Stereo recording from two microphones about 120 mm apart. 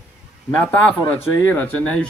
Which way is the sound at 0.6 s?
10° left (ahead or behind).